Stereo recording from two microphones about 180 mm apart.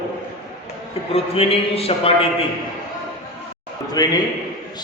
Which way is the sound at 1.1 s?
35° left (ahead or behind).